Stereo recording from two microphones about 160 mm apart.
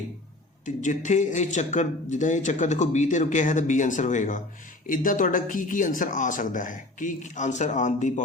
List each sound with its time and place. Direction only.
0.6 s speech: 50° left (ahead or behind)